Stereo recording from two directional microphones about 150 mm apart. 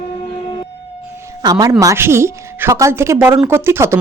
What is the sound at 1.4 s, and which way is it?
A woman's voice, 25° right (ahead or behind).